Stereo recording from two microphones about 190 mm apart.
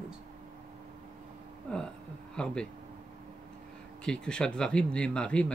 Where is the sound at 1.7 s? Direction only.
5° left (ahead or behind).